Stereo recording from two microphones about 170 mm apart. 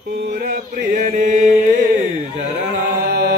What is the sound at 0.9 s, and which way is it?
Chant, 50° right (ahead or behind).